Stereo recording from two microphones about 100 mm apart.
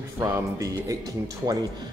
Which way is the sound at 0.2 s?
30° right (ahead or behind).